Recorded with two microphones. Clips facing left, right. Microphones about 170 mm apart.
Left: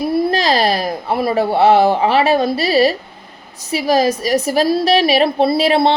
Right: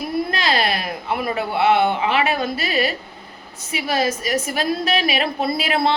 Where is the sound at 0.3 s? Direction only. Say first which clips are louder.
Left 6 dB; 35° left (ahead or behind).